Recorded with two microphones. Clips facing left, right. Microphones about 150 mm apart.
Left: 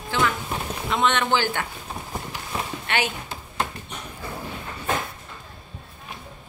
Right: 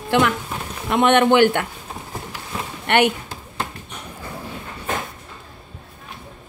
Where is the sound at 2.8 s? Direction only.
60° right (ahead or behind).